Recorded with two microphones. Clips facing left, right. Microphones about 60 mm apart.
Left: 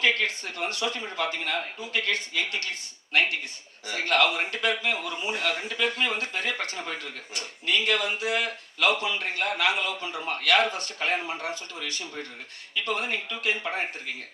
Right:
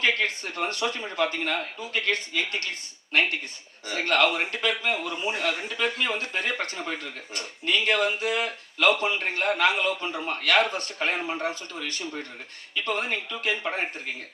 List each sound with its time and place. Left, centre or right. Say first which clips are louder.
0.0 s speech: even; right
3.8 s a man's voice: right 1 dB; right